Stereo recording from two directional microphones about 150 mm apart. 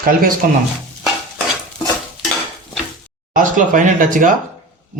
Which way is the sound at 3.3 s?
60° right (ahead or behind).